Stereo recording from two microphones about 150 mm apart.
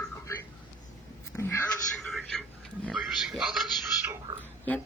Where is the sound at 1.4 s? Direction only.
20° left (ahead or behind).